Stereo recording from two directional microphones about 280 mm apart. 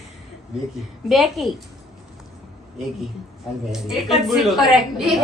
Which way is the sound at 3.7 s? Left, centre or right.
Centre.